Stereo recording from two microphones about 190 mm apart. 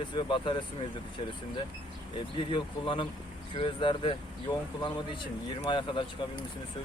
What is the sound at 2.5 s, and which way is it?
Speech, 25° left (ahead or behind).